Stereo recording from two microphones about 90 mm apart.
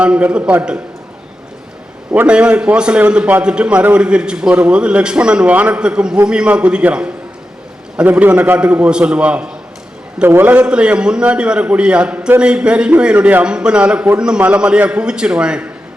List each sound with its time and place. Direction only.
0.0 s a man's voice: 15° right (ahead or behind)
2.2 s a man's voice: 10° right (ahead or behind)
10.2 s a man's voice: 25° right (ahead or behind)
10.5 s a man's voice: 15° right (ahead or behind)